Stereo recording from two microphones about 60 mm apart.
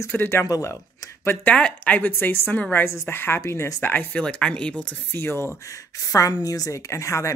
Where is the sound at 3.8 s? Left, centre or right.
Left.